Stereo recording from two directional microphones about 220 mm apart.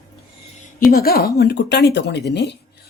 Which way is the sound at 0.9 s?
45° left (ahead or behind).